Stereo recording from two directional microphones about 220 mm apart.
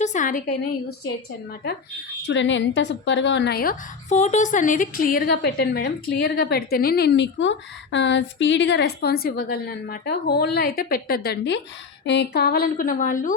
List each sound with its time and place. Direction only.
0.0 s a woman's voice: 35° left (ahead or behind)
2.2 s a woman's voice: 55° left (ahead or behind); by 13.3 s 35° left (ahead or behind)